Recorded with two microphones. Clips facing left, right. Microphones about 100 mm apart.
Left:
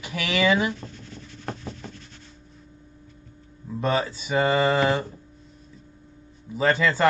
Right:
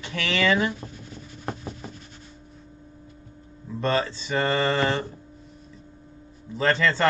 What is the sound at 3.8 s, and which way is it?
Speech, 10° left (ahead or behind).